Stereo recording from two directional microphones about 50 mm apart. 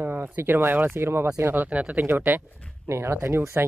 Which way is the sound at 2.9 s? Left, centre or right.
Right.